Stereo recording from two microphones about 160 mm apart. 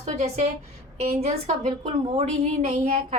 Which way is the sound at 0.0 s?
45° right (ahead or behind).